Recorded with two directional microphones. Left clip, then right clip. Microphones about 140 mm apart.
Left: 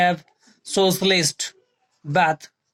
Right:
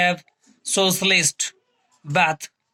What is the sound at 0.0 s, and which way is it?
Speech, 50° left (ahead or behind).